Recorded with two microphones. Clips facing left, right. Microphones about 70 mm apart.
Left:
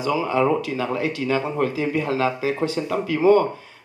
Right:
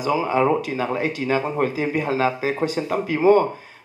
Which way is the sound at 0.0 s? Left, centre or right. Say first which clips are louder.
Right 1 dB; centre.